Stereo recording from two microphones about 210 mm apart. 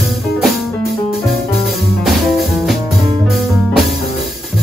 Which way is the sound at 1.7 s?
Centre (ahead or behind).